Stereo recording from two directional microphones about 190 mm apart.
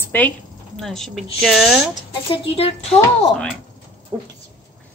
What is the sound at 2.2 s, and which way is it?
Speech, 30° left (ahead or behind).